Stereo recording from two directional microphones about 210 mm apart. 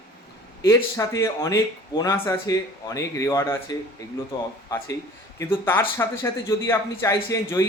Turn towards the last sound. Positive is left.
turn(degrees=15)  # may be behind; listen again after turning